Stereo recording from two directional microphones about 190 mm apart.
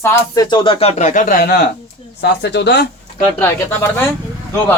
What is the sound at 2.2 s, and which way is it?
Speech, 65° left (ahead or behind).